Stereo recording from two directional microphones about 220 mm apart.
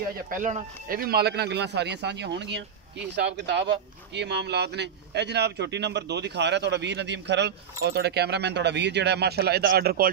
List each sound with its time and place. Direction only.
0.3 s speech: 35° right (ahead or behind)